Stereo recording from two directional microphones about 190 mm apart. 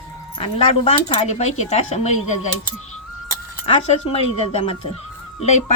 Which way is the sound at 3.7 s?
30° left (ahead or behind).